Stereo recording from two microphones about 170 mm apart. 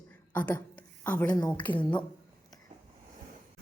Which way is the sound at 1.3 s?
25° left (ahead or behind).